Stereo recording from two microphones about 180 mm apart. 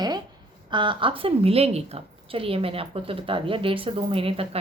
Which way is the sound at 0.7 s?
25° right (ahead or behind).